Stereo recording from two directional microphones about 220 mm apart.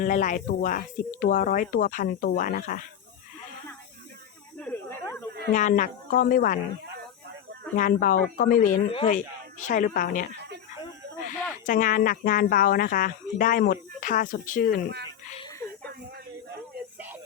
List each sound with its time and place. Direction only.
0.0 s speech: 35° left (ahead or behind)
4.6 s snake: 10° left (ahead or behind)
5.5 s speech: 35° left (ahead or behind)
7.8 s speech: 35° left (ahead or behind)
11.6 s speech: 35° left (ahead or behind)
15.4 s a sound: 15° left (ahead or behind)